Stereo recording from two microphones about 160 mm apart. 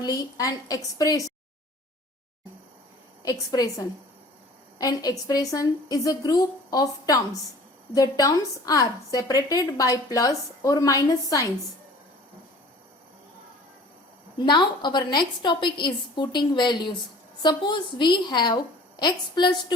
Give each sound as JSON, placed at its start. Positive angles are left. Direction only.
{"t": 0.0, "sound": "a woman's voice", "side_deg": 20}
{"t": 3.2, "sound": "a woman's voice", "side_deg": 25}
{"t": 4.8, "sound": "a woman's voice", "side_deg": 25}
{"t": 14.3, "sound": "a woman's voice", "side_deg": 30}